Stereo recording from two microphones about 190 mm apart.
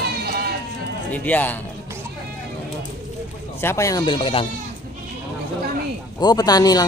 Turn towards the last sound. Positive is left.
turn(degrees=20)  # may be behind; listen again after turning